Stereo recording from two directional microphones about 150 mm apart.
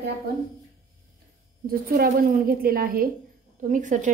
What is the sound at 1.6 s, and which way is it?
A woman's voice, 75° right (ahead or behind).